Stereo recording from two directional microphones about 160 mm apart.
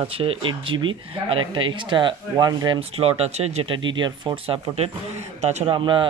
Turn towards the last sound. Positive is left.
turn(degrees=-30)  # may be behind; listen again after turning